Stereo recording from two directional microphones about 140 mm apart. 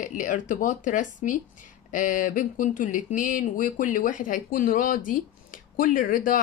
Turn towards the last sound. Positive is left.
turn(degrees=75)  # may be behind; listen again after turning